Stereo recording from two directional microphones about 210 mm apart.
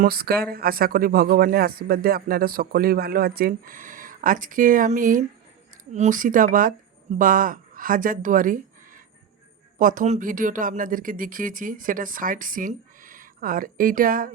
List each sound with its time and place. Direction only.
0.0 s speech: 45° right (ahead or behind)